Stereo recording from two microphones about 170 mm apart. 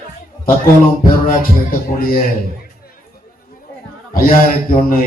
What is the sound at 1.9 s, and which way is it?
Speech, 55° left (ahead or behind).